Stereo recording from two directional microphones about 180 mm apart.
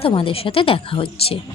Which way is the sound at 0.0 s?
30° left (ahead or behind).